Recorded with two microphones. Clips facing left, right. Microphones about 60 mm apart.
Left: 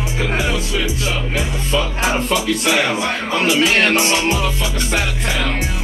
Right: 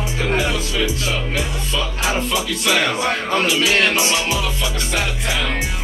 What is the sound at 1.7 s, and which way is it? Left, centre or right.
Speech, left.